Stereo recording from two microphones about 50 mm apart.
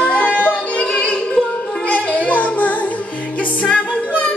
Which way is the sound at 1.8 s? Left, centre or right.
Left.